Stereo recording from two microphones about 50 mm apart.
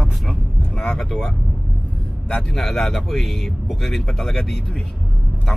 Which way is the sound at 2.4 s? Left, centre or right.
Centre.